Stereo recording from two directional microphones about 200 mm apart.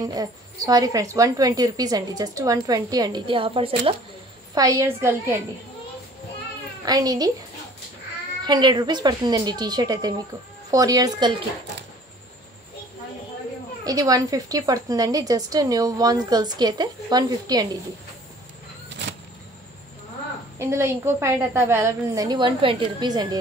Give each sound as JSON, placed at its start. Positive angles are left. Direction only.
{"t": 0.0, "sound": "a woman's voice", "side_deg": -20}
{"t": 4.6, "sound": "a woman's voice", "side_deg": -15}
{"t": 6.9, "sound": "a woman's voice", "side_deg": -20}
{"t": 8.5, "sound": "a woman's voice", "side_deg": -20}
{"t": 13.8, "sound": "a woman's voice", "side_deg": -15}
{"t": 20.5, "sound": "a woman's voice", "side_deg": -15}